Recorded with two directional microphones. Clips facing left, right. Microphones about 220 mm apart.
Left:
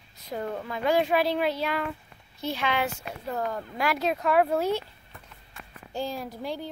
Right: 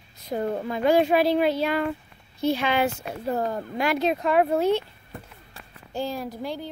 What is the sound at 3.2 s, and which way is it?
Speech, 30° right (ahead or behind).